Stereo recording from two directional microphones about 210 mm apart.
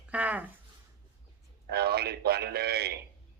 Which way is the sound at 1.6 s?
50° right (ahead or behind).